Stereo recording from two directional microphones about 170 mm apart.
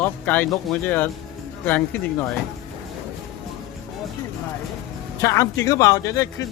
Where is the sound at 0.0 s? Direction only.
10° left (ahead or behind).